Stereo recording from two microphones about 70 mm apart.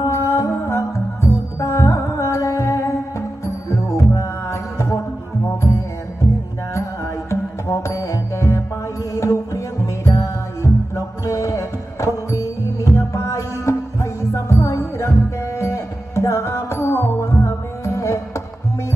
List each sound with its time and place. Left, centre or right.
0.0 s music: left
7.2 s music: left